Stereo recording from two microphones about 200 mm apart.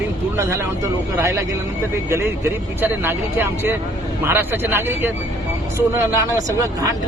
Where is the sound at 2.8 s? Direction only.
10° right (ahead or behind).